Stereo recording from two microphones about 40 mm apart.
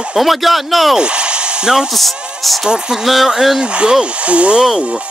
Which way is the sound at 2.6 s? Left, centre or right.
Centre.